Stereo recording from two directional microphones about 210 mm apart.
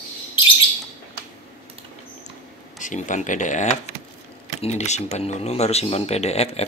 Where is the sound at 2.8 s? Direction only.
35° left (ahead or behind).